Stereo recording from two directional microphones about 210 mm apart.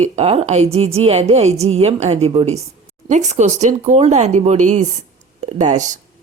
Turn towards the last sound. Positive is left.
turn(degrees=-35)  # may be behind; listen again after turning